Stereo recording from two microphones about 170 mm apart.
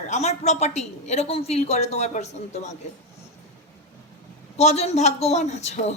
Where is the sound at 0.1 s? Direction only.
40° left (ahead or behind).